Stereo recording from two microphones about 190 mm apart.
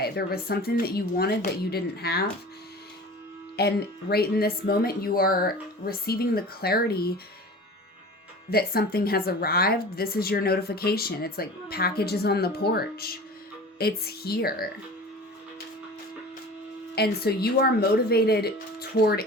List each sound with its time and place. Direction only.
0.0 s speech: 55° left (ahead or behind)
3.6 s a woman's voice: 55° left (ahead or behind)
8.4 s a woman's voice: 55° left (ahead or behind)
16.9 s speech: 55° left (ahead or behind)